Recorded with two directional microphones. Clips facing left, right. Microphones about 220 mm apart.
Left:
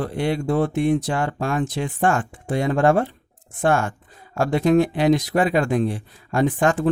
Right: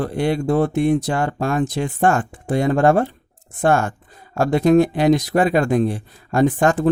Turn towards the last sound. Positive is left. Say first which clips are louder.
# right 3 dB
turn(degrees=-40)  # may be behind; listen again after turning